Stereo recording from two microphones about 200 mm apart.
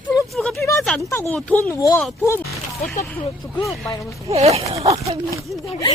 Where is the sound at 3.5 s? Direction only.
20° left (ahead or behind).